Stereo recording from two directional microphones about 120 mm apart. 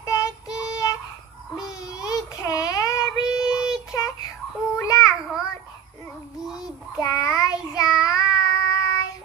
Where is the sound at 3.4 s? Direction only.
5° right (ahead or behind).